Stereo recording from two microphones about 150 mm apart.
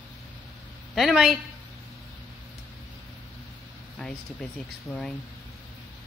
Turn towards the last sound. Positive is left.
turn(degrees=10)  # may be behind; listen again after turning